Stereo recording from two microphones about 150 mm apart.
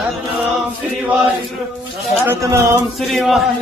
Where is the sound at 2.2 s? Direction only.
20° right (ahead or behind).